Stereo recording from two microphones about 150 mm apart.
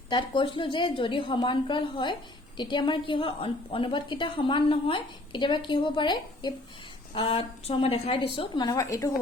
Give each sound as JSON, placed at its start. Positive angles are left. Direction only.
{"t": 0.1, "sound": "a woman's voice", "side_deg": 30}